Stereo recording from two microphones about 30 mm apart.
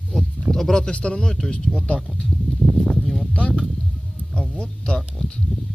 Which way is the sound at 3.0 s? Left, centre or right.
Centre.